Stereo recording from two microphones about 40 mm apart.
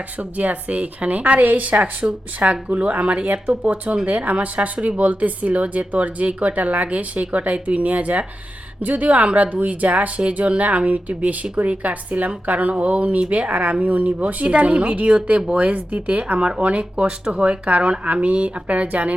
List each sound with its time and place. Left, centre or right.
0.2 s speech: right